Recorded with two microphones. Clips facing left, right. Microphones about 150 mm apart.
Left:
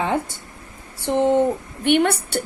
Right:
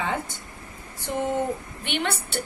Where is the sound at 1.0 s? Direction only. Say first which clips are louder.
Left 9 dB; 85° left.